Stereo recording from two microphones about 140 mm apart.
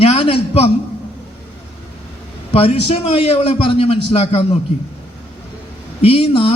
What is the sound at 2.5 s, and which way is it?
A man's voice, 45° left (ahead or behind).